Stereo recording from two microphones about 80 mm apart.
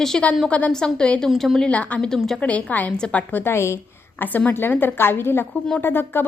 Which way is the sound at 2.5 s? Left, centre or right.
Centre.